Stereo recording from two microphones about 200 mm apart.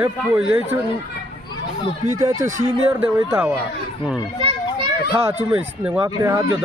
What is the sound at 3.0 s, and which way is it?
Speech, 10° right (ahead or behind).